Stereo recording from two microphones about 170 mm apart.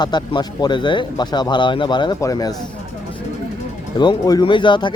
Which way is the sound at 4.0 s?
25° left (ahead or behind).